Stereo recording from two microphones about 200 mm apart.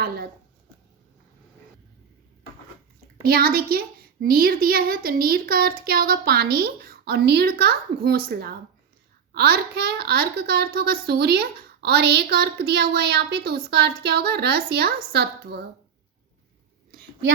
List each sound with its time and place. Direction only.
3.2 s a child's voice: 50° right (ahead or behind)